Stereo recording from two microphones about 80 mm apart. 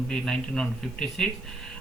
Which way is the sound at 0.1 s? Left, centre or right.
Centre.